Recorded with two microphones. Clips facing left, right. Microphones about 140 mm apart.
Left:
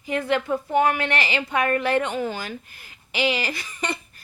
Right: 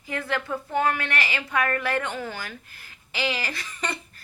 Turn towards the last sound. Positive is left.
turn(degrees=15)  # may be behind; listen again after turning